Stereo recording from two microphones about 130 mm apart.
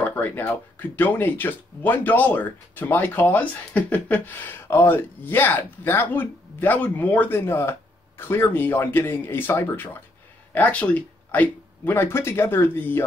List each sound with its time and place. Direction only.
0.0 s speech: 15° left (ahead or behind)